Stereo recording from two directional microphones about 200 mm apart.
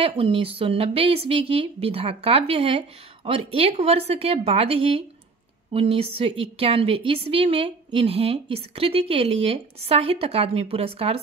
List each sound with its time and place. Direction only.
0.0 s a woman's voice: 30° right (ahead or behind)